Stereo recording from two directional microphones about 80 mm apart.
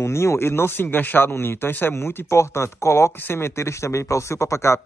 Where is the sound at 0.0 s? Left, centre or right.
Left.